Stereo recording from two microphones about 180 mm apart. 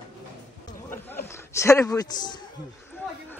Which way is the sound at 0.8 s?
10° left (ahead or behind).